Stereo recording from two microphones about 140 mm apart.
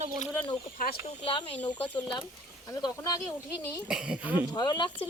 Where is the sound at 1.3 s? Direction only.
40° left (ahead or behind).